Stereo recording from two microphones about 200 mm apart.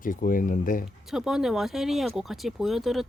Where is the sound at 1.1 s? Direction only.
Centre (ahead or behind).